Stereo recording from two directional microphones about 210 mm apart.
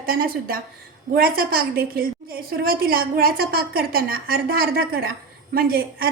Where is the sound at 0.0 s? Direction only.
45° right (ahead or behind).